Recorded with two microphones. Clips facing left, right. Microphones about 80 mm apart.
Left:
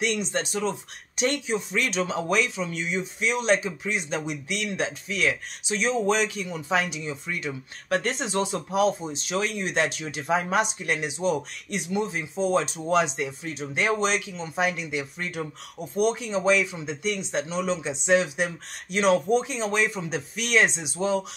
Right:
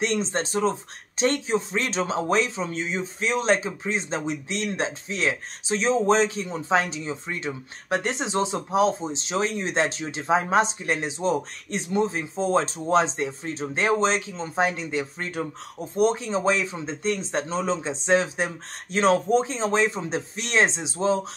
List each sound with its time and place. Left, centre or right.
0.0 s speech: right